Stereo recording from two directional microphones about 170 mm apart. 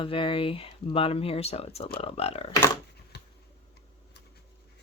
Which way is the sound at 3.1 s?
80° left.